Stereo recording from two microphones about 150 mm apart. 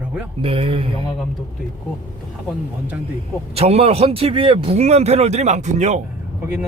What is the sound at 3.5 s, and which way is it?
A man's voice, 45° right (ahead or behind).